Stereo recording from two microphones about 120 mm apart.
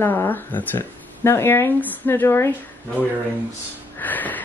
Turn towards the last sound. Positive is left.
turn(degrees=15)  # may be behind; listen again after turning